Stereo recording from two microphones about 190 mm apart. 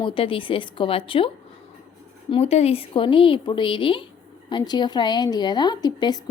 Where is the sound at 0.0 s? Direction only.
30° left (ahead or behind).